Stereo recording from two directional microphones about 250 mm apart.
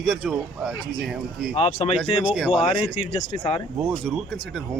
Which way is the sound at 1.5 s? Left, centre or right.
Left.